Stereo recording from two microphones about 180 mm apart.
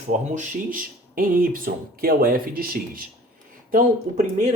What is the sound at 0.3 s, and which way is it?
Speech, 45° right (ahead or behind).